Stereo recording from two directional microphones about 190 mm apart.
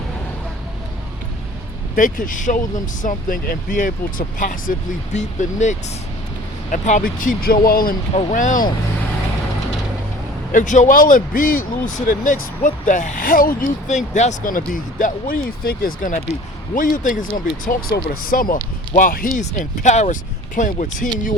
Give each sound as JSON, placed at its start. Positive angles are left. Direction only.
{"t": 2.0, "sound": "speech", "side_deg": 45}
{"t": 8.1, "sound": "speech", "side_deg": 40}
{"t": 10.5, "sound": "speech", "side_deg": 40}